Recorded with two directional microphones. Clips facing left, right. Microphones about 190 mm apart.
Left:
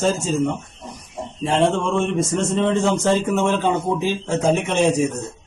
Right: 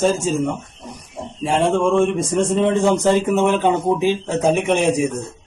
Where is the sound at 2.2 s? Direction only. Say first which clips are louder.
Right 2 dB; 15° right (ahead or behind).